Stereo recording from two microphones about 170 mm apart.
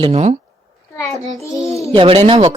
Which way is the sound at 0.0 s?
40° right (ahead or behind).